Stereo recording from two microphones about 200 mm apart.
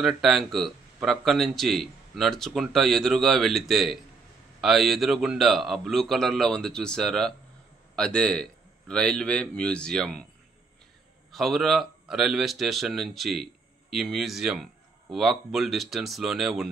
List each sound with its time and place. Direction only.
0.0 s a man's voice: centre (ahead or behind)
11.3 s a man's voice: centre (ahead or behind)